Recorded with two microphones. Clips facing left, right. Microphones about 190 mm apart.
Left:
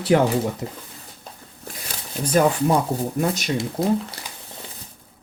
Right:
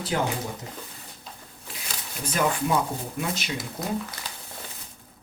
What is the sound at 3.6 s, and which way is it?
Speech, 30° left (ahead or behind).